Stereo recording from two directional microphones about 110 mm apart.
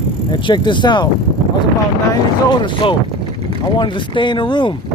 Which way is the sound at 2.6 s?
50° left (ahead or behind).